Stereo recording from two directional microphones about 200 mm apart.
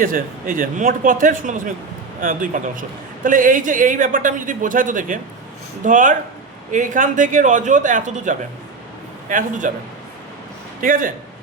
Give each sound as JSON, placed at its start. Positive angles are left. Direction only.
{"t": 0.0, "sound": "a man's voice", "side_deg": -45}
{"t": 10.8, "sound": "a man's voice", "side_deg": -45}